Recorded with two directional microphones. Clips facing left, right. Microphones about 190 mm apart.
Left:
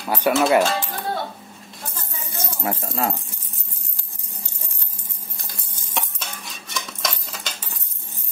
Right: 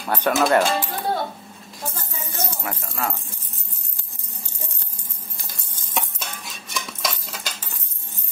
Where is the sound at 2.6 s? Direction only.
30° left (ahead or behind).